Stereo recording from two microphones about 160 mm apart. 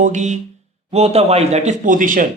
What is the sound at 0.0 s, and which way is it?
A man's voice, 50° right (ahead or behind).